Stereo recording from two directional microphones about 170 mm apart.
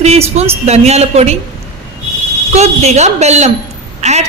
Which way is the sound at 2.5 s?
40° right (ahead or behind).